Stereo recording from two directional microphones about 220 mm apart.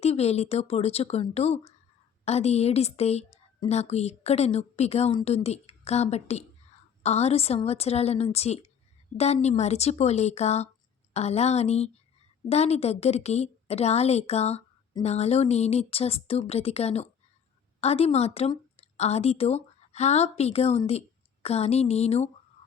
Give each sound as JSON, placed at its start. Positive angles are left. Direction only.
{"t": 0.0, "sound": "a woman's voice", "side_deg": 30}